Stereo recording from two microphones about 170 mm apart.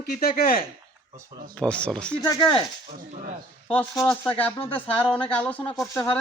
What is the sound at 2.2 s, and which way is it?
Speech, 25° left (ahead or behind).